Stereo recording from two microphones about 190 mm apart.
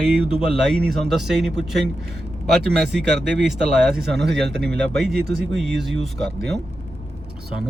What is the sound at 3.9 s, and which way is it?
Speech, 60° right (ahead or behind).